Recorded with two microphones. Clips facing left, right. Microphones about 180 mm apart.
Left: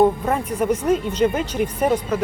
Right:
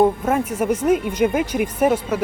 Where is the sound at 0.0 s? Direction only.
5° right (ahead or behind).